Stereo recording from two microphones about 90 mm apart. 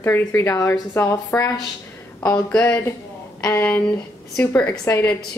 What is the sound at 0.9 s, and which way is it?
Speech, 30° left (ahead or behind).